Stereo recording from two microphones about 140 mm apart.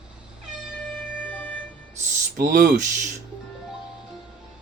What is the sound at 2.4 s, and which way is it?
Speech, 85° right.